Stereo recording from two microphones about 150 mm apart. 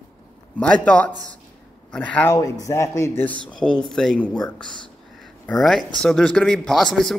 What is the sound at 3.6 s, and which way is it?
A man's voice, 5° left (ahead or behind).